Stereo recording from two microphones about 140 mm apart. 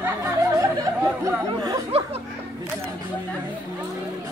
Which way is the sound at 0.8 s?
25° right (ahead or behind).